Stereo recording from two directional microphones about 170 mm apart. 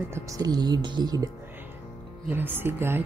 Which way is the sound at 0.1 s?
20° right (ahead or behind).